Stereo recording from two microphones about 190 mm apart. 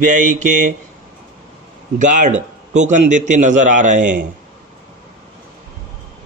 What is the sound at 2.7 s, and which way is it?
Speech, 40° right (ahead or behind).